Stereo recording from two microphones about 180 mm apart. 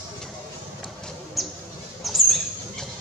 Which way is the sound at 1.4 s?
Centre (ahead or behind).